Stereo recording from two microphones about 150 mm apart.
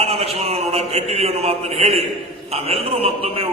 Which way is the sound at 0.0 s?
45° right (ahead or behind).